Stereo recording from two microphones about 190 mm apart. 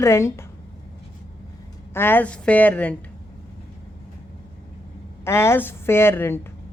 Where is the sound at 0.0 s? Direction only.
15° left (ahead or behind).